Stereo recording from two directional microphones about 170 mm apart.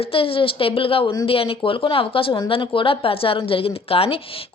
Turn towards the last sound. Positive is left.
turn(degrees=35)  # may be behind; listen again after turning